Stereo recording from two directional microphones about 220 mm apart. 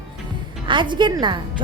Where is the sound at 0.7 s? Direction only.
20° right (ahead or behind).